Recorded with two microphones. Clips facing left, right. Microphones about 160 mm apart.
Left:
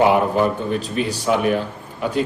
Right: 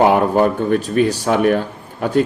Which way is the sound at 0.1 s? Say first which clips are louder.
Right 3 dB; 50° right (ahead or behind).